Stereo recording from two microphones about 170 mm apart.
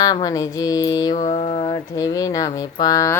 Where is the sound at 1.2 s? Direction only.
35° left (ahead or behind).